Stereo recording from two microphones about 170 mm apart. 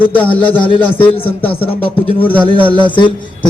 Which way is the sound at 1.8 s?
30° left (ahead or behind).